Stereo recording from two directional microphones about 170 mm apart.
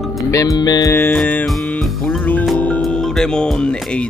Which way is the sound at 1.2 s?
5° left (ahead or behind).